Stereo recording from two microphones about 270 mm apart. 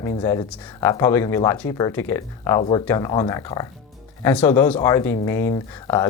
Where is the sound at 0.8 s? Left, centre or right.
Centre.